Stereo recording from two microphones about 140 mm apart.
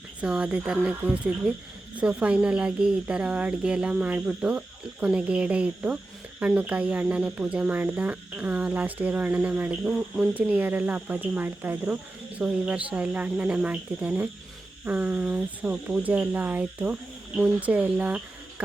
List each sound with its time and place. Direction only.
0.2 s speech: 10° right (ahead or behind)